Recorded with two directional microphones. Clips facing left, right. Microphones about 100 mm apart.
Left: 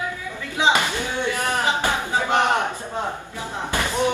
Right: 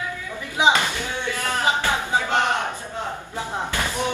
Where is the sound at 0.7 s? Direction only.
15° left (ahead or behind).